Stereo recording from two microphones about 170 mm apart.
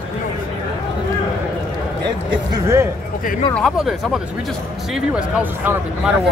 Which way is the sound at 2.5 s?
15° right (ahead or behind).